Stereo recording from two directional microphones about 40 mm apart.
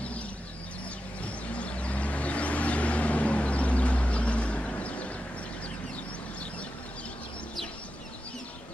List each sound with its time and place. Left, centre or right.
1.5 s vehicle: left